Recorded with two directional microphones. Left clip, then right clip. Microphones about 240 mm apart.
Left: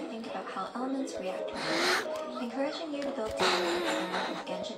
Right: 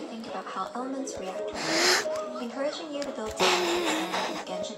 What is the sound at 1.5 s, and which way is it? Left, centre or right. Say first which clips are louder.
Music: right 5 dB; right.